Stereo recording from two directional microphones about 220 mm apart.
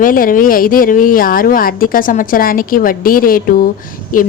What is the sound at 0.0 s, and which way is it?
Speech, 40° left (ahead or behind).